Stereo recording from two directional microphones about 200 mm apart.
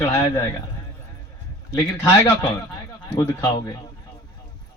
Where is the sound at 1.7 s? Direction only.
15° left (ahead or behind).